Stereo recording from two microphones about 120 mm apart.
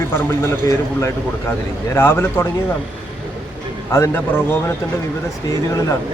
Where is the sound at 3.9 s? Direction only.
20° left (ahead or behind).